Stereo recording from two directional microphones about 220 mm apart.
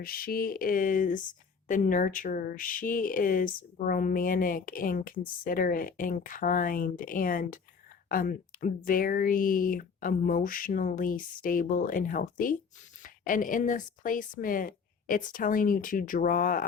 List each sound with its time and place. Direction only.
0.0 s speech: 40° left (ahead or behind)